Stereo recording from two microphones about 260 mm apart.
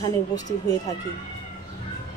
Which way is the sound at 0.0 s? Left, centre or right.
Centre.